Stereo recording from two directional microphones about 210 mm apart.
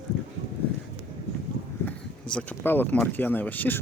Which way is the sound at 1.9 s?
5° left (ahead or behind).